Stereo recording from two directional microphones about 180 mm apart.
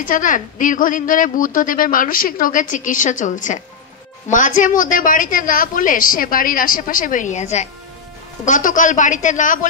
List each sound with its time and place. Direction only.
0.0 s a woman's voice: 50° left (ahead or behind)